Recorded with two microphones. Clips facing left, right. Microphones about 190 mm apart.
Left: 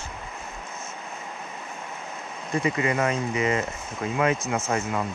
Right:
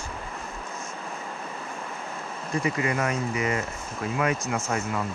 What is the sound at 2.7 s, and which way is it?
Speech, 25° left (ahead or behind).